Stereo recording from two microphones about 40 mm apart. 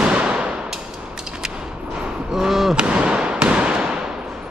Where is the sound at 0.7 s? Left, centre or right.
Centre.